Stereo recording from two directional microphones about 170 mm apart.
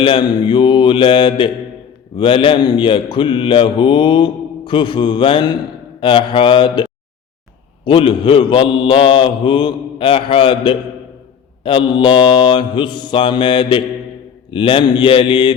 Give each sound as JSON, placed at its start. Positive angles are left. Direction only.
{"t": 0.0, "sound": "mantra", "side_deg": 30}
{"t": 7.9, "sound": "mantra", "side_deg": 30}